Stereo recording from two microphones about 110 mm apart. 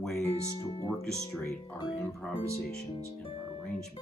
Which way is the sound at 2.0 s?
10° left (ahead or behind).